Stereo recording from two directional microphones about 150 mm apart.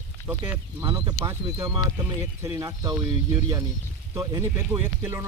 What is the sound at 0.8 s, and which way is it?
Speech, 20° right (ahead or behind).